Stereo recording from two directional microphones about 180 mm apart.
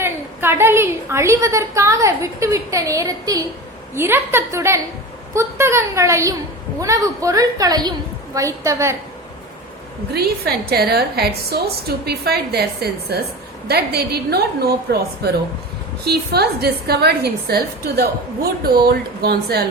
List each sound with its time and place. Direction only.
0.0 s a woman's voice: 15° right (ahead or behind)
10.1 s a woman's voice: 60° right (ahead or behind)